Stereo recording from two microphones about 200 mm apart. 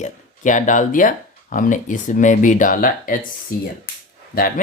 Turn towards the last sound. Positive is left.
turn(degrees=45)  # may be behind; listen again after turning